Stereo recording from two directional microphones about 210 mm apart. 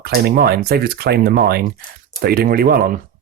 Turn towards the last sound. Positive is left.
turn(degrees=-45)  # may be behind; listen again after turning